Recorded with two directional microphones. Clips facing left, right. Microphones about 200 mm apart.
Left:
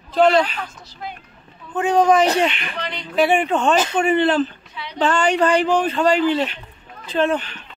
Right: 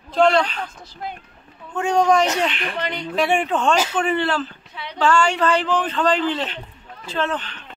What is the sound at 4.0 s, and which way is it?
A man's voice, 15° left (ahead or behind).